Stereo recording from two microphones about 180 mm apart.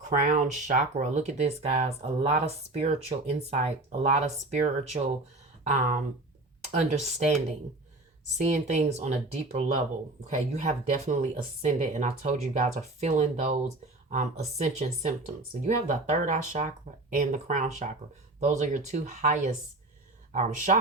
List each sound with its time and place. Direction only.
0.3 s speech: 45° right (ahead or behind)
5.7 s speech: 50° right (ahead or behind)
6.6 s speech: 40° right (ahead or behind)
8.4 s speech: 40° right (ahead or behind)